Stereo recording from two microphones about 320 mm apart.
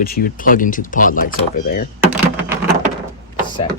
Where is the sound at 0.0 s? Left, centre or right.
Left.